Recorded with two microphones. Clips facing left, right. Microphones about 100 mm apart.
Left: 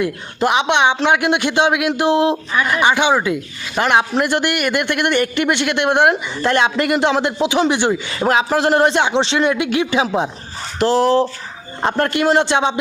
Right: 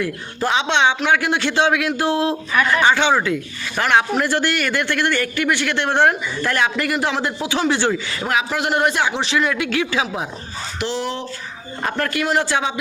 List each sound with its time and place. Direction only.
0.0 s a man's voice: 20° left (ahead or behind)
8.3 s a man's voice: 30° left (ahead or behind)
10.8 s a man's voice: 40° left (ahead or behind); by 12.7 s 25° left (ahead or behind)